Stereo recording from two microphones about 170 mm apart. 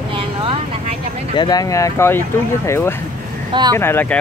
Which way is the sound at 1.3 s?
25° left (ahead or behind).